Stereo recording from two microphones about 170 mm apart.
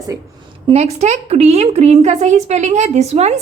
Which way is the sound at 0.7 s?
40° right (ahead or behind).